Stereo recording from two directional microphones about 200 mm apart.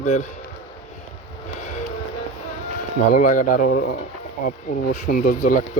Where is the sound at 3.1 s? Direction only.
45° left (ahead or behind).